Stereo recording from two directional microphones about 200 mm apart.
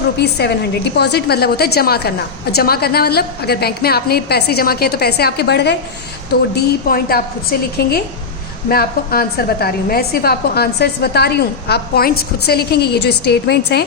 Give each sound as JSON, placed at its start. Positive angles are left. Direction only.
{"t": 0.2, "sound": "a woman's voice", "side_deg": 55}